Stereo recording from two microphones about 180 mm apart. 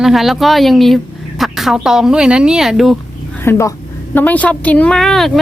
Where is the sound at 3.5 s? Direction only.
15° left (ahead or behind).